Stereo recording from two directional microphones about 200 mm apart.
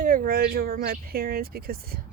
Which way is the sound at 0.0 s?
45° right (ahead or behind).